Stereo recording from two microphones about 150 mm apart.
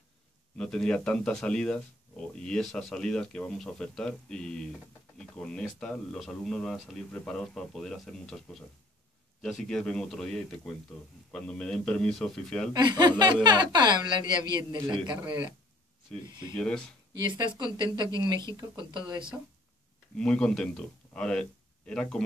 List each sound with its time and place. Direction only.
0.6 s speech: 5° left (ahead or behind)
12.7 s a woman's voice: 25° right (ahead or behind)
16.5 s speech: 5° left (ahead or behind)
17.2 s speech: 30° right (ahead or behind)
20.2 s speech: 5° left (ahead or behind)